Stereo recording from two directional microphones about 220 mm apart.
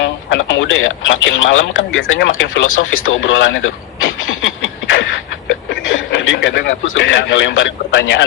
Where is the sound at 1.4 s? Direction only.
60° left (ahead or behind).